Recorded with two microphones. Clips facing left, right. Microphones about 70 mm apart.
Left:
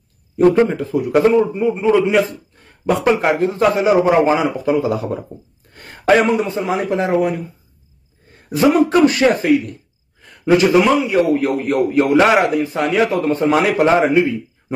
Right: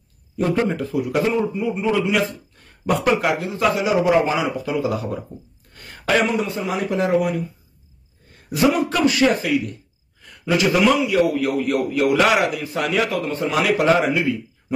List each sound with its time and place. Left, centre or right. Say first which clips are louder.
0.9 s a man's voice: left 8 dB; left
1.5 s a man's voice: left 6 dB; left
8.5 s a man's voice: left 5 dB; left